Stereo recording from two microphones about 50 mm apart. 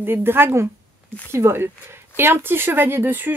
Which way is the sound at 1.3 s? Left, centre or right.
Right.